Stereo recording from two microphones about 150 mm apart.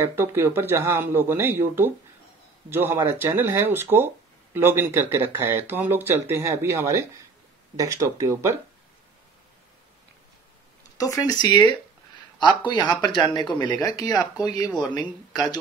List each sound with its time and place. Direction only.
0.0 s speech: 15° right (ahead or behind)
11.0 s speech: 25° left (ahead or behind)